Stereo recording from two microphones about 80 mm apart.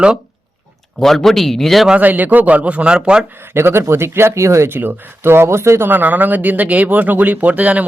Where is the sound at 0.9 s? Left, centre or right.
Centre.